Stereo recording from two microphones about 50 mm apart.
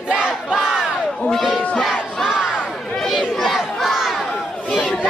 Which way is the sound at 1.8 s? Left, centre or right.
Centre.